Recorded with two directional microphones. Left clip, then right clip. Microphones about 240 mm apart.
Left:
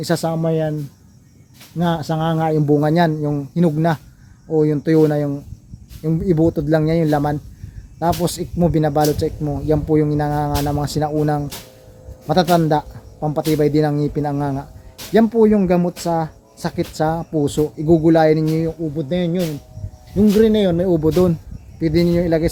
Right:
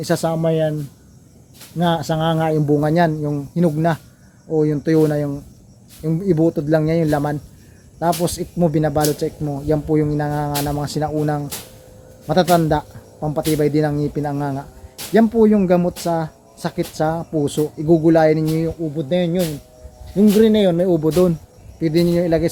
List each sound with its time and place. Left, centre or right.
0.0 s speech: centre
1.8 s speech: centre